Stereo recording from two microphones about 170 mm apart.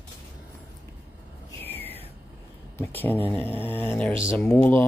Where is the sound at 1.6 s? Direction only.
10° left (ahead or behind).